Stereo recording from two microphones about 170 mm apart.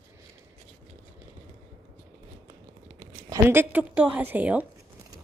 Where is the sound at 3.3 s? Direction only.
15° right (ahead or behind).